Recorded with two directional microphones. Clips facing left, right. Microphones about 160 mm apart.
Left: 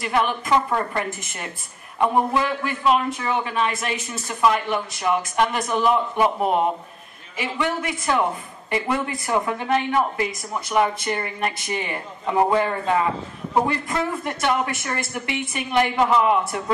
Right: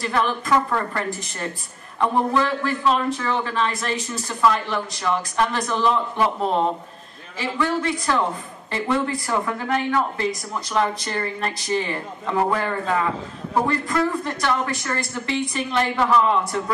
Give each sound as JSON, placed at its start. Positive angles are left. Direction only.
{"t": 0.0, "sound": "speech", "side_deg": 20}